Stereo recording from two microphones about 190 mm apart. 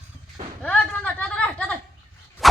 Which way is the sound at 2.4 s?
Centre (ahead or behind).